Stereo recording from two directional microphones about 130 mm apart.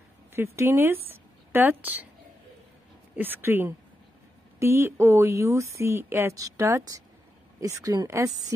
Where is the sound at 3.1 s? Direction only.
15° right (ahead or behind).